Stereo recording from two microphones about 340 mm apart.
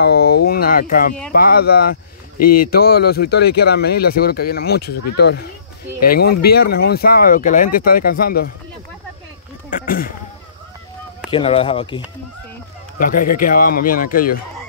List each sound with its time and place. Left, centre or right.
0.0 s speech: left
9.7 s speech: left
11.2 s speech: centre
13.0 s speech: left